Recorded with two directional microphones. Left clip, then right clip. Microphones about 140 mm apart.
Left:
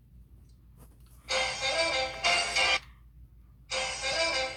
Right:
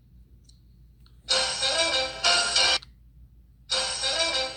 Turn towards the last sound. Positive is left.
turn(degrees=10)  # may be behind; listen again after turning